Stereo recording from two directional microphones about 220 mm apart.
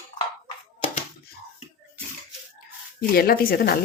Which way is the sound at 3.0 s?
40° left (ahead or behind).